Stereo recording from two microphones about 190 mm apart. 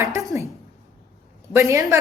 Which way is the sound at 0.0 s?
15° right (ahead or behind).